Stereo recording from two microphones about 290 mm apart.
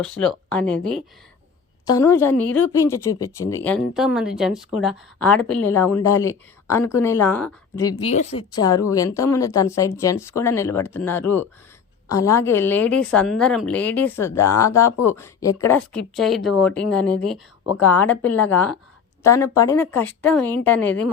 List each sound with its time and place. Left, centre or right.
0.0 s a woman's voice: centre
8.1 s a woman's voice: left; by 21.1 s centre